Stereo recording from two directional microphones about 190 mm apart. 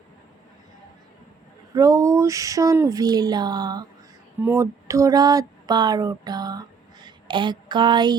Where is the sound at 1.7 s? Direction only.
20° right (ahead or behind).